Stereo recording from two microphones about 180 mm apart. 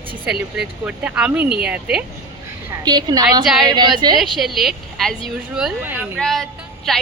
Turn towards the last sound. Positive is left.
turn(degrees=0)  # may be behind; listen again after turning